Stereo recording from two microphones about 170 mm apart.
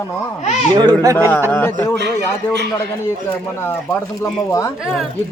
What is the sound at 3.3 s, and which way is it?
Speech, 15° left (ahead or behind).